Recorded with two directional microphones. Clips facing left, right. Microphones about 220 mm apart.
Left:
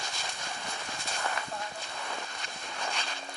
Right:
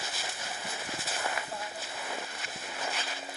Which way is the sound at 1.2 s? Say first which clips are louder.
Left 1 dB; 20° right (ahead or behind).